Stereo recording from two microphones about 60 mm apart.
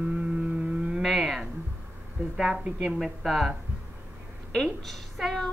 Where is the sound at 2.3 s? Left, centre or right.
Centre.